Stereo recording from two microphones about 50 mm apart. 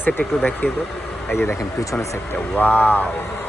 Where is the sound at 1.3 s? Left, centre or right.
Left.